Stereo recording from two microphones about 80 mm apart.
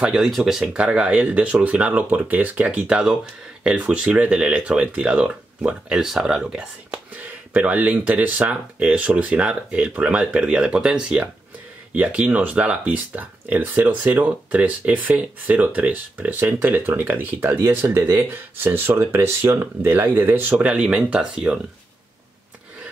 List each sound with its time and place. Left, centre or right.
0.0 s speech: centre
6.9 s speech: right